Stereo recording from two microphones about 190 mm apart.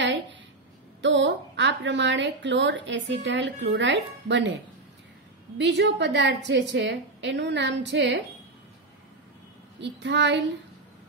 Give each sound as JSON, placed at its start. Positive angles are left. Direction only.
{"t": 0.0, "sound": "a sound", "side_deg": -70}
{"t": 1.0, "sound": "a woman's voice", "side_deg": -70}
{"t": 5.6, "sound": "a woman's voice", "side_deg": -70}
{"t": 9.8, "sound": "a woman's voice", "side_deg": -65}